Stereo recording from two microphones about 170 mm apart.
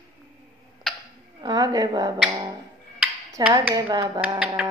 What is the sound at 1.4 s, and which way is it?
Speech, 20° right (ahead or behind).